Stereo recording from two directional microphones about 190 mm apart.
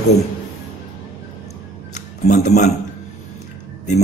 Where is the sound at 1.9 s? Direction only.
40° left (ahead or behind).